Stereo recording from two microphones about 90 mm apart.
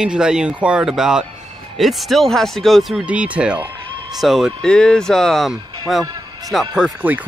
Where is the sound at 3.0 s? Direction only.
15° right (ahead or behind).